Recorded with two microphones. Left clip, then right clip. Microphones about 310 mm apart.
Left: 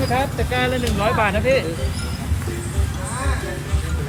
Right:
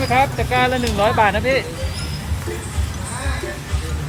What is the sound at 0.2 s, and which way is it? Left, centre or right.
Speech, right.